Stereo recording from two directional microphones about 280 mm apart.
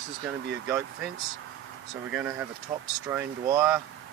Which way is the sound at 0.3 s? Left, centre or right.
Centre.